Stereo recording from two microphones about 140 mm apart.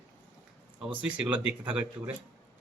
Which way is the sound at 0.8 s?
5° right (ahead or behind).